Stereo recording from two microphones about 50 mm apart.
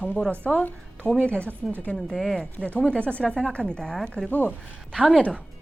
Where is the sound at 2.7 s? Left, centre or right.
Left.